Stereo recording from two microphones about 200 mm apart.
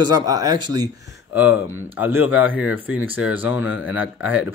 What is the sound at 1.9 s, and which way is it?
Speech, 10° right (ahead or behind).